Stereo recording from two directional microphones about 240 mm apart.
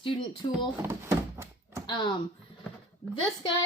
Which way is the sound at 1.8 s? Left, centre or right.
Centre.